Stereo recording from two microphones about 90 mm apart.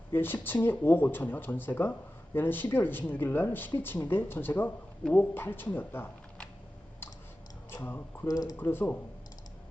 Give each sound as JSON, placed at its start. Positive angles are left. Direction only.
{"t": 0.1, "sound": "speech", "side_deg": 25}
{"t": 7.7, "sound": "speech", "side_deg": 25}
{"t": 8.3, "sound": "speech", "side_deg": 45}
{"t": 8.5, "sound": "speech", "side_deg": 25}